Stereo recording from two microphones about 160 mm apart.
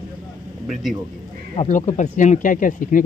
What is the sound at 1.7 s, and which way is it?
Speech, 45° left (ahead or behind).